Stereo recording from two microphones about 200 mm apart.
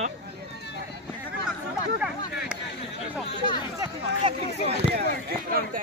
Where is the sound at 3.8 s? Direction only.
25° right (ahead or behind).